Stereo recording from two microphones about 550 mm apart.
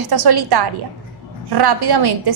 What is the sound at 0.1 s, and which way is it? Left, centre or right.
A woman's voice, right.